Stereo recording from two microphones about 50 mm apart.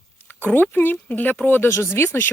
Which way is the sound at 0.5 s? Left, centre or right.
Left.